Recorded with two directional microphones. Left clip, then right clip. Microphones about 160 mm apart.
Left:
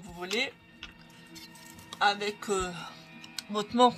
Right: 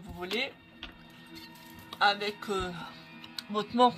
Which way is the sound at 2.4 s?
25° left (ahead or behind).